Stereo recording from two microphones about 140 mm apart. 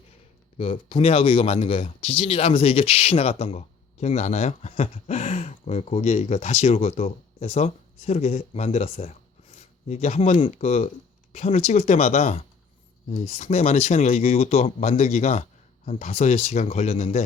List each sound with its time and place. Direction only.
0.6 s speech: 40° left (ahead or behind)